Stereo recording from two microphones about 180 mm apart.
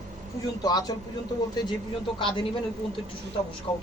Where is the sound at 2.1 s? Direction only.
25° left (ahead or behind).